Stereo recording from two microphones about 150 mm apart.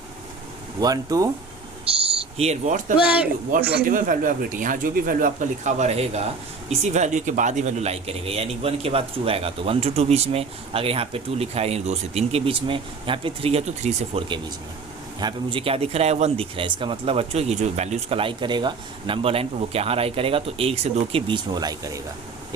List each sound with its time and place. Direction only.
0.8 s speech: 25° right (ahead or behind)
1.9 s speech: 40° right (ahead or behind)
3.7 s speech: 75° right (ahead or behind); by 14.3 s 45° right (ahead or behind)
15.2 s speech: 30° right (ahead or behind)